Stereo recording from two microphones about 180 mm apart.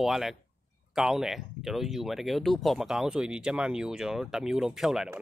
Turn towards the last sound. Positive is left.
turn(degrees=0)  # may be behind; listen again after turning